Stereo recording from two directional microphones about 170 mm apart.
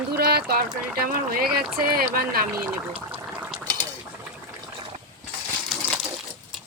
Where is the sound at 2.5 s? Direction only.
10° right (ahead or behind).